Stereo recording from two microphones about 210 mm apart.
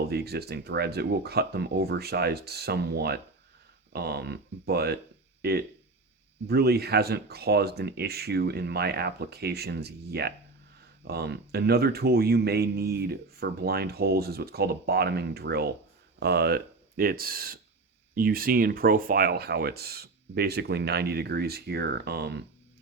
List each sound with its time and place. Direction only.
0.1 s speech: 50° right (ahead or behind)